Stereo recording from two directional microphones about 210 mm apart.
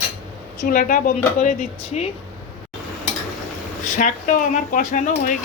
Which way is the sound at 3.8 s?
40° left (ahead or behind).